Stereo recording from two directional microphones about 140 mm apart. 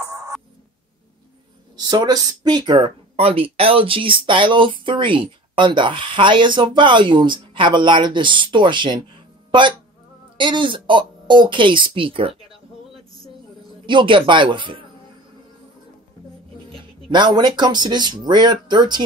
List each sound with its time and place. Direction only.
0.0 s music: 20° right (ahead or behind)
1.8 s speech: 30° right (ahead or behind)
13.8 s speech: 35° right (ahead or behind)
16.7 s speech: 35° right (ahead or behind)